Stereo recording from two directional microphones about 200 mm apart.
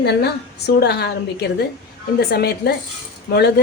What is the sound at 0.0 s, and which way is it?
A woman's voice, 55° left (ahead or behind).